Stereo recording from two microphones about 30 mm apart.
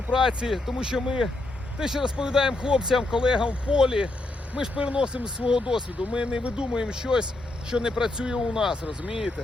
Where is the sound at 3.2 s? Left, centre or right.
Right.